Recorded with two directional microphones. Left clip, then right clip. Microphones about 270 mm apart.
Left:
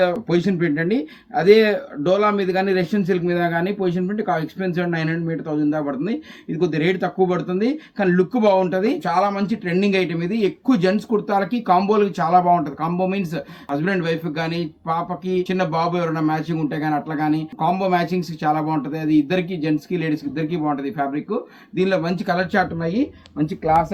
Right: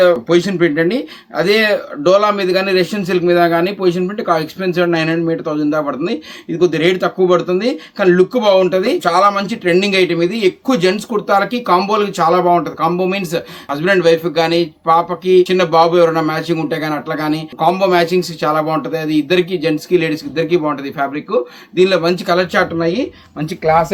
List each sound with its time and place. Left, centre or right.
0.0 s a man's voice: centre
23.4 s speech: right